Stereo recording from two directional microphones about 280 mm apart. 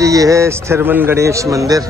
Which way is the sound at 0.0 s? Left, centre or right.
Centre.